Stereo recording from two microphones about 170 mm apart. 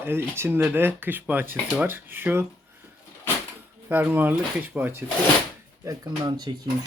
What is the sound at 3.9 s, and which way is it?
Speech, 10° right (ahead or behind).